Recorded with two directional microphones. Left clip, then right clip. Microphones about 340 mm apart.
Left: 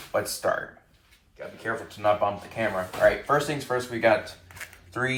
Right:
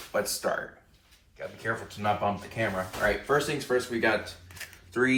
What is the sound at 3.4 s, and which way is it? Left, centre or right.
Speech, centre.